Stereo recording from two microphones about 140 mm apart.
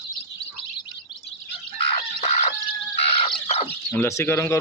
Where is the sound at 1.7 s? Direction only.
45° left (ahead or behind).